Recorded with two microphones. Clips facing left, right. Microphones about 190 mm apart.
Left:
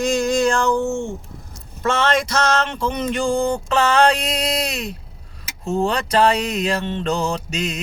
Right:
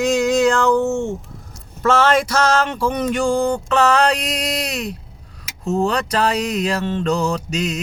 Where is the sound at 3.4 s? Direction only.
25° left (ahead or behind).